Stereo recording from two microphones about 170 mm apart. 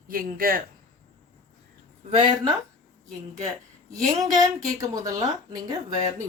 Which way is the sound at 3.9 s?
20° right (ahead or behind).